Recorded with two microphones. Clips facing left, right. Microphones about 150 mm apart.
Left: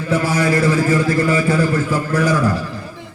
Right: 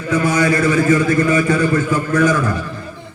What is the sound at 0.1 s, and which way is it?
A man's voice, 30° left (ahead or behind).